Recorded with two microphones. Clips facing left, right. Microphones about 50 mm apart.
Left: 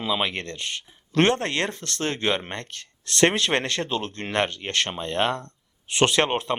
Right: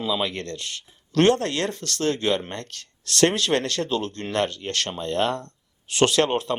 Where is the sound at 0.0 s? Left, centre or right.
Left.